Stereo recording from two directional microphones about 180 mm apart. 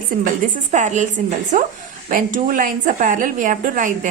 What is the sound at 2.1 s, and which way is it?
A woman's voice, 50° right (ahead or behind).